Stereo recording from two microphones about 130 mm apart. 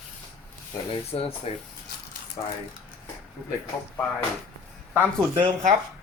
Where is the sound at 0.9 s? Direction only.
45° left (ahead or behind).